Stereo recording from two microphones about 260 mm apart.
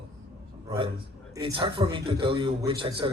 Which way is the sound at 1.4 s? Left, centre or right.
Centre.